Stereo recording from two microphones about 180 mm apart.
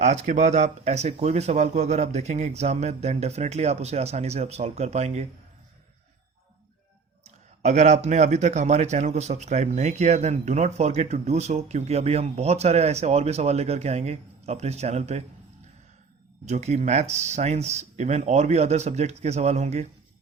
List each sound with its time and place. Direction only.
0.0 s speech: 40° right (ahead or behind)
7.3 s speech: 40° right (ahead or behind)
16.5 s speech: 40° right (ahead or behind)